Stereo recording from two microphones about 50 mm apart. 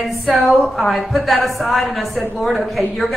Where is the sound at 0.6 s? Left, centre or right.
Centre.